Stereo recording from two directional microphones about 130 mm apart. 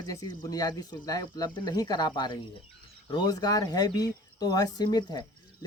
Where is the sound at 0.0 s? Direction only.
30° left (ahead or behind).